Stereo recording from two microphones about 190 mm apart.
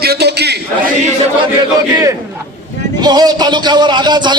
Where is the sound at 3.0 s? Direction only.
20° right (ahead or behind).